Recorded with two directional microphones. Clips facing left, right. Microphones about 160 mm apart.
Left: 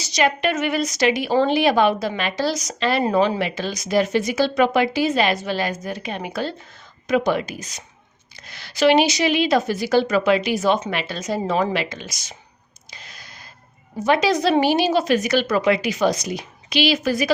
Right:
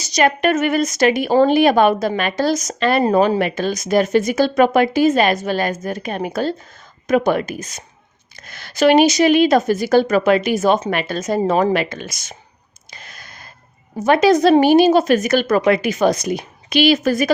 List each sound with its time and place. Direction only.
0.0 s a woman's voice: 45° right (ahead or behind)
12.9 s a sound: 50° right (ahead or behind)
14.0 s a woman's voice: 50° right (ahead or behind)